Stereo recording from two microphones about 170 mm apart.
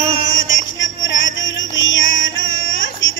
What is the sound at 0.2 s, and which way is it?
Music, 90° left.